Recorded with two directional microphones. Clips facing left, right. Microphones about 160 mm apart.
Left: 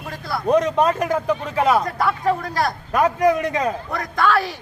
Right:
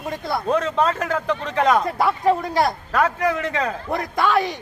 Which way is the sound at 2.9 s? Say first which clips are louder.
Left 3 dB; 15° left (ahead or behind).